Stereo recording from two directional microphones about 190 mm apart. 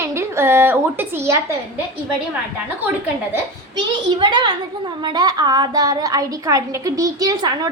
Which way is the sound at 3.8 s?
25° right (ahead or behind).